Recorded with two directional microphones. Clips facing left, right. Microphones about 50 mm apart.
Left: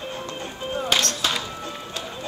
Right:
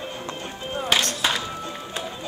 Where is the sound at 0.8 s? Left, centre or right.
Centre.